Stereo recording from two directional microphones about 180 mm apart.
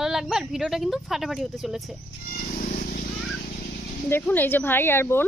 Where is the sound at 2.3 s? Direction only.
50° left (ahead or behind).